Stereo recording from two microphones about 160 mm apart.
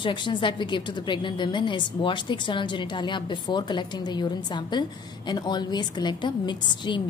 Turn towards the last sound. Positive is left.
turn(degrees=30)  # may be behind; listen again after turning